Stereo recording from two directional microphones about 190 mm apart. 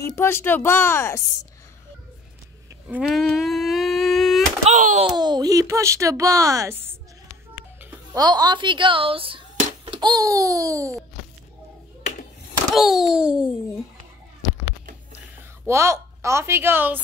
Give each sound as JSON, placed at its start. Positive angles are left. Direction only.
{"t": 0.0, "sound": "speech", "side_deg": 15}
{"t": 2.9, "sound": "humming", "side_deg": 0}
{"t": 4.6, "sound": "speech", "side_deg": -40}
{"t": 5.1, "sound": "speech", "side_deg": -20}
{"t": 12.7, "sound": "a child's voice", "side_deg": 0}
{"t": 15.6, "sound": "a woman's voice", "side_deg": -15}